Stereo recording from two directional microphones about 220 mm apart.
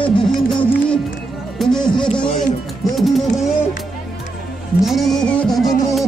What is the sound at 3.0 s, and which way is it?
Music, centre (ahead or behind).